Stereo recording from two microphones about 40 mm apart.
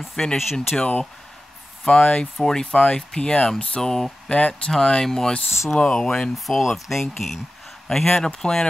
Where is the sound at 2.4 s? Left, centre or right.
Centre.